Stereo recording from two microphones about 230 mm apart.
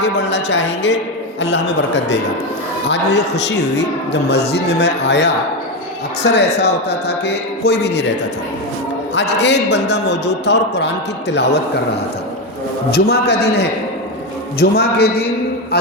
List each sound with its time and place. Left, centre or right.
0.0 s a man's voice: left
2.9 s a man's voice: left
9.1 s a man's voice: left
12.9 s a man's voice: left